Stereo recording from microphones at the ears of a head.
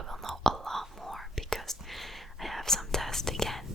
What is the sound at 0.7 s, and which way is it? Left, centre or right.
Whispering, centre.